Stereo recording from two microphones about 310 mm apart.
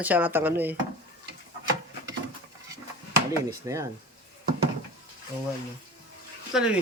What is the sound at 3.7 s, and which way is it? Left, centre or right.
Speech, centre.